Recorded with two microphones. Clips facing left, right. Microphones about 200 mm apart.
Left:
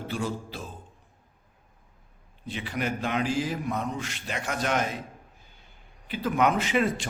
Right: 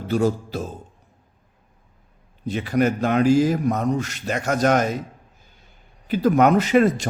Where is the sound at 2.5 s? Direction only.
45° right (ahead or behind).